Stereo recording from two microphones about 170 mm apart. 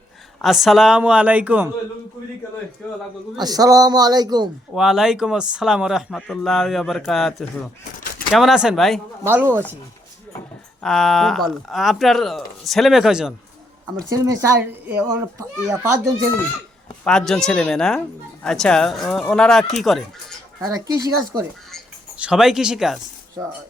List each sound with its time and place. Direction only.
0.4 s a child's voice: centre (ahead or behind)
3.3 s a man's voice: 25° right (ahead or behind)
4.7 s speech: 5° right (ahead or behind)
9.2 s a child's voice: 15° right (ahead or behind)
10.8 s speech: centre (ahead or behind)
14.3 s a child's voice: 20° right (ahead or behind)
17.0 s speech: 5° left (ahead or behind)
20.6 s a man's voice: 20° right (ahead or behind)
22.2 s speech: 5° right (ahead or behind)